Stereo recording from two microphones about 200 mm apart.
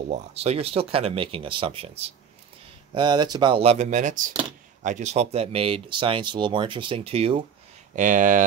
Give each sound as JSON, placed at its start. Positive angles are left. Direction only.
{"t": 0.1, "sound": "speech", "side_deg": -30}
{"t": 7.9, "sound": "speech", "side_deg": -40}